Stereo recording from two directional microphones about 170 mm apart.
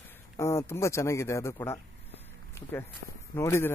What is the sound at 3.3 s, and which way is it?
Speech, 15° left (ahead or behind).